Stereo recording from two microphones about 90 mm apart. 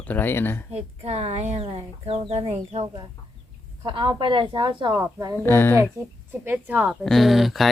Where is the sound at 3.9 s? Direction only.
60° right (ahead or behind).